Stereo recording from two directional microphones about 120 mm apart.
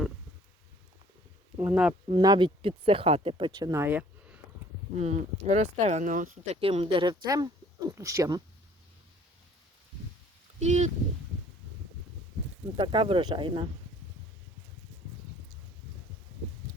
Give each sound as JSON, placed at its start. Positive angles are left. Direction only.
{"t": 1.5, "sound": "speech", "side_deg": -10}
{"t": 2.2, "sound": "speech", "side_deg": -35}
{"t": 2.6, "sound": "speech", "side_deg": -50}
{"t": 3.6, "sound": "speech", "side_deg": -25}
{"t": 4.9, "sound": "speech", "side_deg": -65}
{"t": 6.6, "sound": "speech", "side_deg": -50}
{"t": 10.6, "sound": "speech", "side_deg": -75}
{"t": 12.7, "sound": "speech", "side_deg": -45}